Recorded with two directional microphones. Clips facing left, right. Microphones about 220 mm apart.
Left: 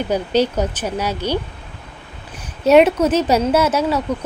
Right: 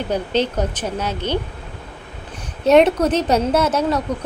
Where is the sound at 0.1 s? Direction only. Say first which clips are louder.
Left 2 dB; 10° left (ahead or behind).